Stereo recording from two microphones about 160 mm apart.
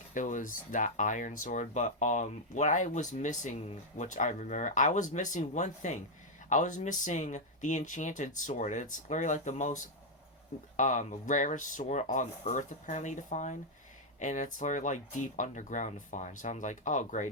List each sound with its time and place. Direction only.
0.1 s speech: 55° left (ahead or behind)